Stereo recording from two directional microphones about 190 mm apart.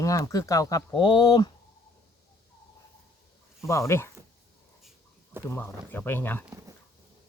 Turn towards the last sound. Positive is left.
turn(degrees=10)  # may be behind; listen again after turning